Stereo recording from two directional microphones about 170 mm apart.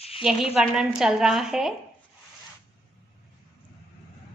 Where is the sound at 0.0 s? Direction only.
35° left (ahead or behind).